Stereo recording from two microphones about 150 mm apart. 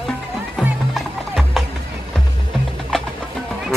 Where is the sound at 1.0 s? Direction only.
Centre (ahead or behind).